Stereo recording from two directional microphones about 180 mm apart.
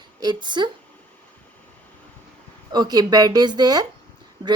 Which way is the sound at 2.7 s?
20° right (ahead or behind).